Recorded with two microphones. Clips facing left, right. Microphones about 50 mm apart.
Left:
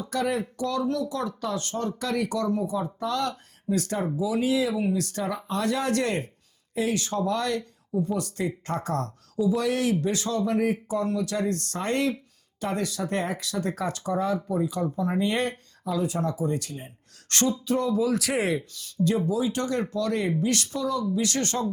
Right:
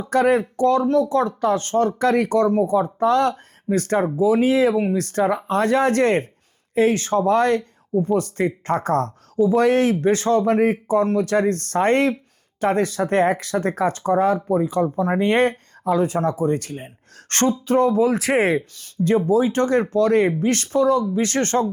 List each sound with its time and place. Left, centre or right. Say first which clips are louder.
0.0 s speech: right 9 dB; right